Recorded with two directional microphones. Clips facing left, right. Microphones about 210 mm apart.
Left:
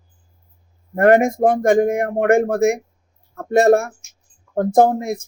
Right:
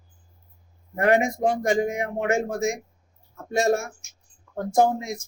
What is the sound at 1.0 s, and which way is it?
Speech, 50° left (ahead or behind).